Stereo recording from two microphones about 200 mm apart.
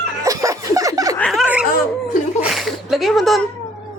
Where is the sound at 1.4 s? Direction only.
5° right (ahead or behind).